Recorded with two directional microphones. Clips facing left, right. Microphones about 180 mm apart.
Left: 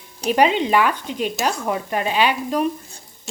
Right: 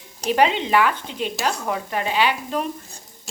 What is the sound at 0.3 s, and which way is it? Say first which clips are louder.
Speech: left 2 dB; 15° left (ahead or behind).